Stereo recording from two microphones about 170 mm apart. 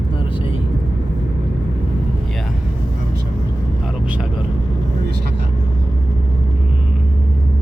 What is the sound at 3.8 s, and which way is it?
Vehicle, 5° right (ahead or behind).